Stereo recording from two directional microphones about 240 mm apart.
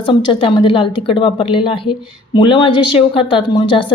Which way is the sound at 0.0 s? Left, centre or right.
Left.